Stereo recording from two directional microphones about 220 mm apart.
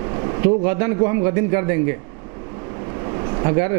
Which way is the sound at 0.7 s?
15° right (ahead or behind).